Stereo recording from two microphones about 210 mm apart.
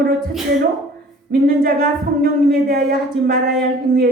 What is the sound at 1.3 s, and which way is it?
Speech, 45° right (ahead or behind).